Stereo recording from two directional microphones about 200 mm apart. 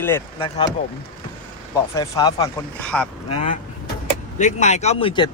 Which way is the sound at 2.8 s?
5° left (ahead or behind).